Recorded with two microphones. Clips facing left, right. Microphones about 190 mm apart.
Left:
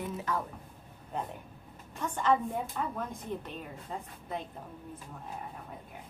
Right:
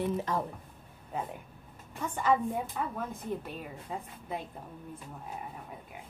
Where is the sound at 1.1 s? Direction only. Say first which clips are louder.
Even; 5° right (ahead or behind).